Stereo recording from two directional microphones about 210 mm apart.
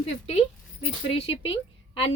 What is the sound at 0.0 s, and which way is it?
A woman's voice, 30° left (ahead or behind).